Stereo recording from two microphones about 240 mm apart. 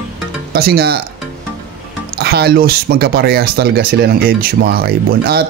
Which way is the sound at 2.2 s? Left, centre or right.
Right.